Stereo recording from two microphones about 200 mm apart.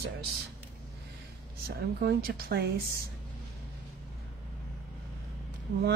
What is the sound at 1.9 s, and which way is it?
Speech, 50° right (ahead or behind).